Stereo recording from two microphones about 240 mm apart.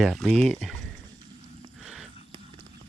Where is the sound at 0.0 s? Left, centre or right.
Centre.